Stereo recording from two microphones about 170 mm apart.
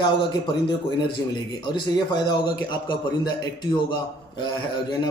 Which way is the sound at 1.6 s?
25° left (ahead or behind).